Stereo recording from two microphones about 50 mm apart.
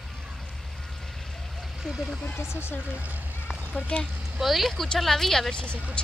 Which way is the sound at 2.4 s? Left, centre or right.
Left.